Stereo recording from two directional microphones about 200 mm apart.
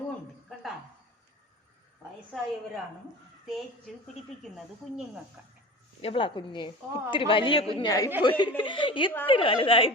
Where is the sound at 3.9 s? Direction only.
Centre (ahead or behind).